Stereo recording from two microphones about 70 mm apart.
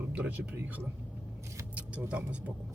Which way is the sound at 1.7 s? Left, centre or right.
Right.